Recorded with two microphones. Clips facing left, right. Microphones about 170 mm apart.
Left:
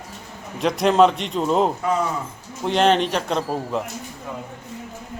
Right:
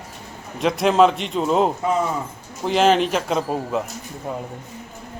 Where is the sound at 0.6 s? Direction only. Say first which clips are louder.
Even; centre (ahead or behind).